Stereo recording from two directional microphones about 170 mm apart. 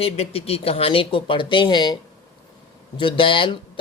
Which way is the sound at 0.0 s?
35° left (ahead or behind).